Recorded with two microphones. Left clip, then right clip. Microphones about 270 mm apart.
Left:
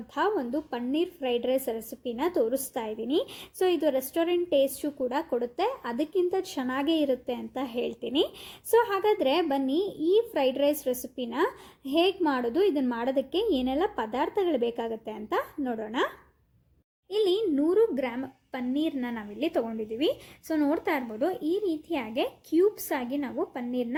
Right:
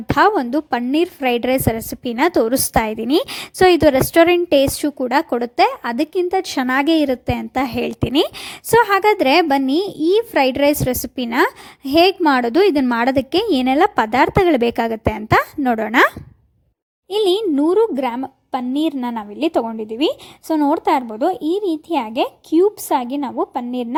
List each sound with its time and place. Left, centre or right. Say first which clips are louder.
0.2 s a woman's voice: right 13 dB; right
17.1 s a woman's voice: right 9 dB; right